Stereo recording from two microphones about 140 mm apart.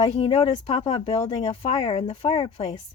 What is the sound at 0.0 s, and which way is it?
Speech, 45° left (ahead or behind).